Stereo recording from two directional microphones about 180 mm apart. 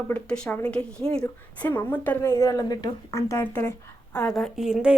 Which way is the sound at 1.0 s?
30° right (ahead or behind).